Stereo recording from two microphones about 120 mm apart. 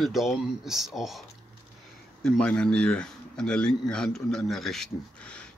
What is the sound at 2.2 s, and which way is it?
Speech, 10° left (ahead or behind).